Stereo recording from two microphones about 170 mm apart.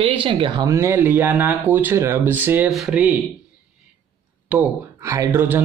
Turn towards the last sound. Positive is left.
turn(degrees=-10)  # may be behind; listen again after turning